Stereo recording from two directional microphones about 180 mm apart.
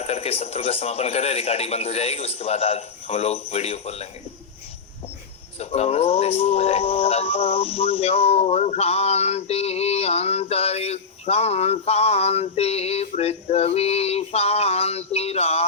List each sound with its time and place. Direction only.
0.0 s speech: 35° left (ahead or behind)
5.5 s speech: 35° left (ahead or behind)